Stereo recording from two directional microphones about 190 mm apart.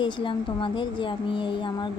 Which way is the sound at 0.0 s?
25° left (ahead or behind).